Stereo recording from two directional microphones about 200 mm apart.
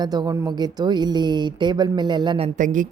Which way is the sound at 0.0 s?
20° right (ahead or behind).